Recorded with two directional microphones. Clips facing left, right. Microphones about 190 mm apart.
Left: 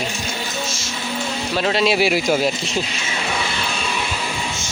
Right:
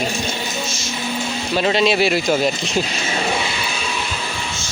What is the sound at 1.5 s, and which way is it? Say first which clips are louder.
Speech: right 2 dB; centre (ahead or behind).